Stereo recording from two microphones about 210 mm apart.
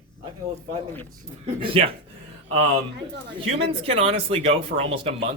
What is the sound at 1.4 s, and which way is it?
Speech, 25° right (ahead or behind).